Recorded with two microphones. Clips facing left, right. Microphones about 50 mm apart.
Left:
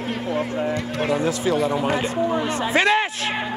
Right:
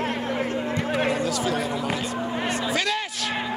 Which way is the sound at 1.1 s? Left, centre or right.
Left.